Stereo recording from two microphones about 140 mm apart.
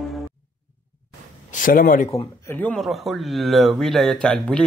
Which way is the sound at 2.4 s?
15° left (ahead or behind).